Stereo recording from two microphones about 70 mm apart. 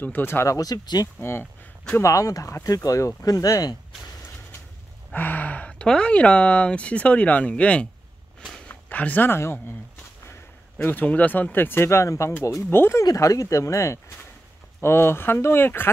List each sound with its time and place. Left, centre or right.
0.0 s speech: left
0.5 s speech: left
1.2 s speech: left
2.0 s speech: left
5.1 s speech: left
10.8 s speech: left
12.6 s speech: left
13.0 s speech: left
14.8 s speech: left